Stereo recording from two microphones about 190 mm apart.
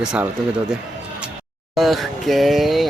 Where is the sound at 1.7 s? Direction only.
Centre (ahead or behind).